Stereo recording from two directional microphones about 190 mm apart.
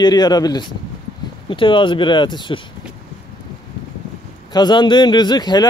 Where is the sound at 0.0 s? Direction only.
20° left (ahead or behind).